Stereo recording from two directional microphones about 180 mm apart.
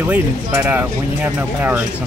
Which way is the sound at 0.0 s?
10° right (ahead or behind).